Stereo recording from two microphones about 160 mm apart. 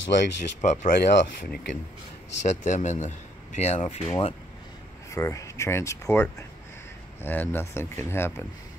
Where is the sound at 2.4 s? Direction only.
50° left (ahead or behind).